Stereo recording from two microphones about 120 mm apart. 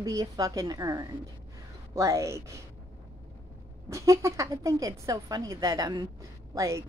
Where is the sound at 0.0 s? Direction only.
30° right (ahead or behind).